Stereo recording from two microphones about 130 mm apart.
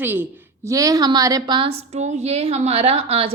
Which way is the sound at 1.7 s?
55° right (ahead or behind).